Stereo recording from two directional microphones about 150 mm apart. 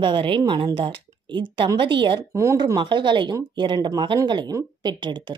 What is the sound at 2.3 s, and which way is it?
Speech, 20° right (ahead or behind).